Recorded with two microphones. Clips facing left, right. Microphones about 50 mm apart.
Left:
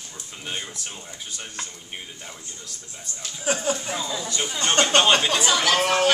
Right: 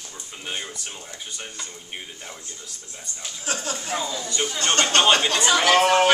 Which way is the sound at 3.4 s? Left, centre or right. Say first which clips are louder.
Left 5 dB; centre.